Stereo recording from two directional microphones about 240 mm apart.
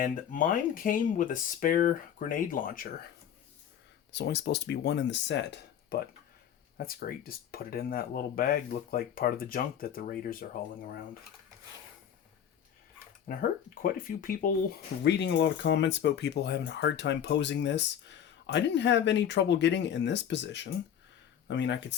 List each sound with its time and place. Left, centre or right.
0.0 s speech: left
4.1 s speech: left
13.3 s speech: left
15.0 s speech: left